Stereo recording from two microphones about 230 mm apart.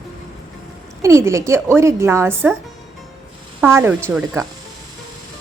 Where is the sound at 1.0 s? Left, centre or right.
Centre.